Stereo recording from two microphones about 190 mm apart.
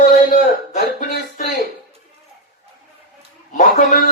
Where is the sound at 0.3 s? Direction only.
40° left (ahead or behind).